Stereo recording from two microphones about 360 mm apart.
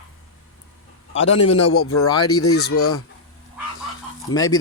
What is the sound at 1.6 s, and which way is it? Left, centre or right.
Speech, left.